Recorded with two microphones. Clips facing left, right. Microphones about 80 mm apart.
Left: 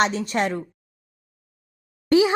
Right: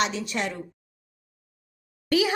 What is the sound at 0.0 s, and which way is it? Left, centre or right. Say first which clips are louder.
Speech: left 5 dB; left.